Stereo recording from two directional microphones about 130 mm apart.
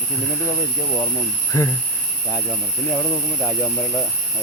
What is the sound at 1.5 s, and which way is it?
Speech, 25° left (ahead or behind).